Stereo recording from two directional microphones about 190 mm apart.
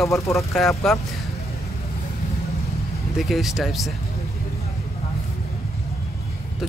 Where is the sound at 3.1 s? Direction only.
Centre (ahead or behind).